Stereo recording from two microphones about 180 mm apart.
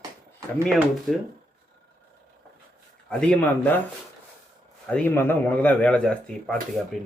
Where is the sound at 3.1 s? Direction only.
5° left (ahead or behind).